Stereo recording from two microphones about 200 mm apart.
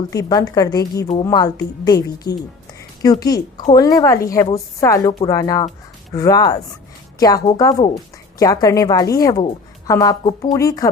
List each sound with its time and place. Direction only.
0.1 s a woman's voice: 20° left (ahead or behind)